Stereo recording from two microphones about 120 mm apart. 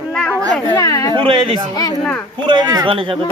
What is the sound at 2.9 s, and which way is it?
Speech, 50° right (ahead or behind).